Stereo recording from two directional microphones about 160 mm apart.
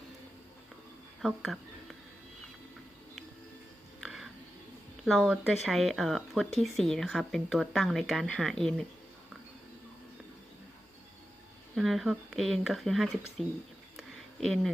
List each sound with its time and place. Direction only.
1.2 s speech: centre (ahead or behind)
4.0 s a sound: centre (ahead or behind)
5.0 s speech: centre (ahead or behind)
11.7 s speech: centre (ahead or behind)
14.4 s speech: centre (ahead or behind)